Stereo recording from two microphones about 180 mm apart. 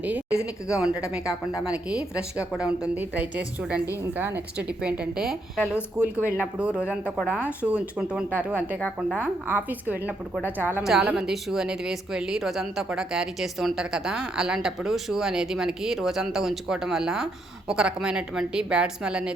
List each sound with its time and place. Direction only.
0.7 s a woman's voice: 5° right (ahead or behind)